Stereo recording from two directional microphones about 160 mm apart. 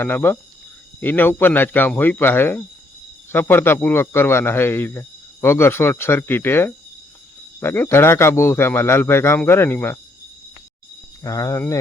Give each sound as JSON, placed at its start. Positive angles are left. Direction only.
{"t": 0.0, "sound": "speech", "side_deg": 15}
{"t": 11.2, "sound": "speech", "side_deg": 20}